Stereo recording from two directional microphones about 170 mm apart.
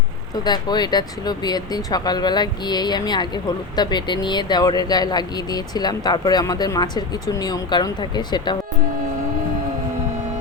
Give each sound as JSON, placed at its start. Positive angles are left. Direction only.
{"t": 0.4, "sound": "speech", "side_deg": 25}